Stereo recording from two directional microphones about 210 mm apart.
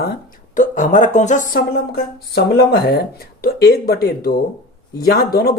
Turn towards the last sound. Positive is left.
turn(degrees=50)  # may be behind; listen again after turning